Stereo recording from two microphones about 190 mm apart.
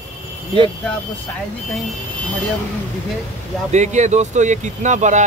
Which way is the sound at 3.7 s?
40° right (ahead or behind).